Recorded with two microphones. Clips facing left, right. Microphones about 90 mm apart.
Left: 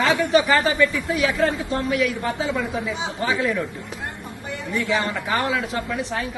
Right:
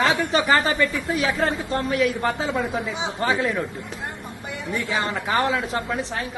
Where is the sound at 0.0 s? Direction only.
35° right (ahead or behind).